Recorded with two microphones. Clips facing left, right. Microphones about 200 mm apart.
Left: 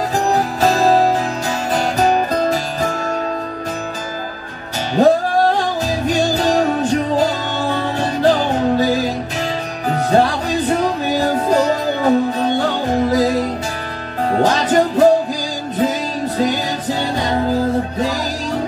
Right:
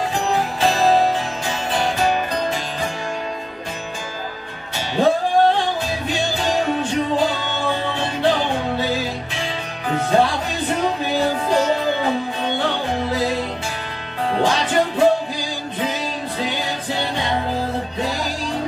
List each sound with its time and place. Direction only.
0.1 s music: 40° left (ahead or behind)
5.0 s music: 40° left (ahead or behind)
16.3 s music: 40° left (ahead or behind)